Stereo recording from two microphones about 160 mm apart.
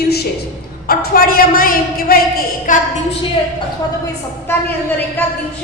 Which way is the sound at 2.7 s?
55° left (ahead or behind).